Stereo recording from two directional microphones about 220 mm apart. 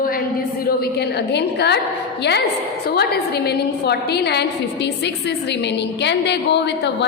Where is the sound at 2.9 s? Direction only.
45° left (ahead or behind).